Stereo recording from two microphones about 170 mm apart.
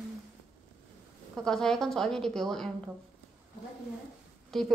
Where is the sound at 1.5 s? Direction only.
5° left (ahead or behind).